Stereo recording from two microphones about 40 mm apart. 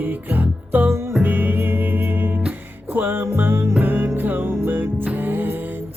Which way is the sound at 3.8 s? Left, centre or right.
Right.